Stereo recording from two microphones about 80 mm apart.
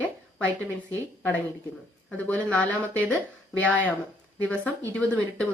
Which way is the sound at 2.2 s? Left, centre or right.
Centre.